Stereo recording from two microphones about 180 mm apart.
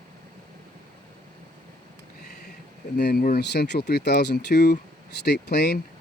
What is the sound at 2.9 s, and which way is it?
Speech, 60° left (ahead or behind).